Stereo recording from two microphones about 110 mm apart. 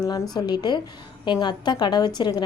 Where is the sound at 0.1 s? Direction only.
40° left (ahead or behind).